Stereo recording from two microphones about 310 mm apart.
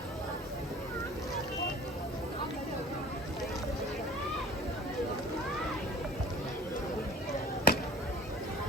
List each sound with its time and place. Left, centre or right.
7.7 s basketball bounce: left